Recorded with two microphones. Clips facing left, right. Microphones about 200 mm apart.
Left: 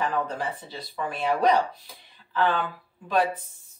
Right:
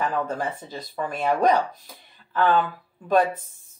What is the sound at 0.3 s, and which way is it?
Speech, 45° right (ahead or behind).